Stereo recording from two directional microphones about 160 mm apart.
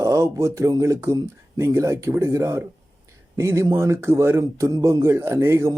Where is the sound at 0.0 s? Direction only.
20° right (ahead or behind).